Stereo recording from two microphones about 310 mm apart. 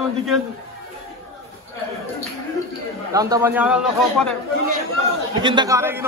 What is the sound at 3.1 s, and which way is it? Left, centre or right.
A man's voice, centre.